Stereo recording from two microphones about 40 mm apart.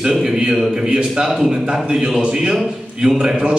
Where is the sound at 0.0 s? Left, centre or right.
Centre.